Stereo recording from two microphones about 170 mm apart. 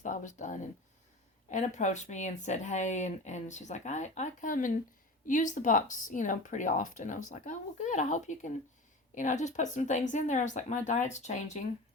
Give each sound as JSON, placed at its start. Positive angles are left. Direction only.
{"t": 0.0, "sound": "speech", "side_deg": 50}